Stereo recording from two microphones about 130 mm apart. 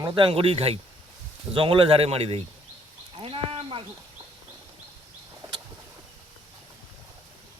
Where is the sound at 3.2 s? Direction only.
45° right (ahead or behind).